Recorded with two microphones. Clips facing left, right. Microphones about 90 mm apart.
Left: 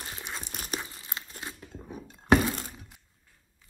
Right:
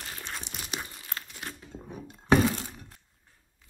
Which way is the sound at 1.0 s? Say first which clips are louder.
Even; 25° left (ahead or behind).